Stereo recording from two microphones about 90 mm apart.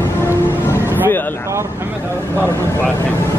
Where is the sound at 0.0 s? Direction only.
30° left (ahead or behind).